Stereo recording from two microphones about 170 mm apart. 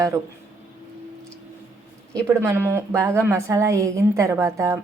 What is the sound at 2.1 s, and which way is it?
A woman's voice, 15° right (ahead or behind).